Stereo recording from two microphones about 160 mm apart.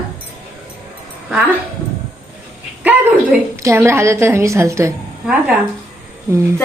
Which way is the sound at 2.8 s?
10° right (ahead or behind).